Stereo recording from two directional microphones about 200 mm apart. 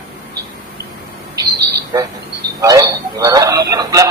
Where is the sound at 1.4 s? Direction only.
15° right (ahead or behind).